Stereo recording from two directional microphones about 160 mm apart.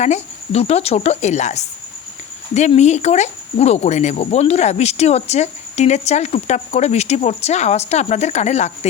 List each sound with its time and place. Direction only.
0.0 s speech: 45° left (ahead or behind)